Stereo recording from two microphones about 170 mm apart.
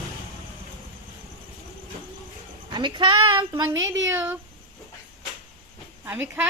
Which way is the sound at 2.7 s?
25° right (ahead or behind).